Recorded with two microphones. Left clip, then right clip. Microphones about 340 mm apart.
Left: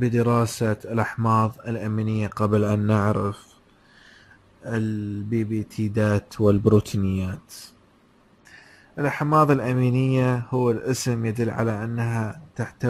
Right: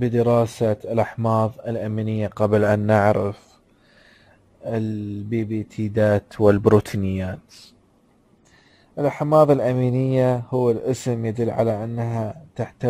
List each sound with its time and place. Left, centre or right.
0.0 s speech: centre
4.6 s speech: centre
8.9 s speech: centre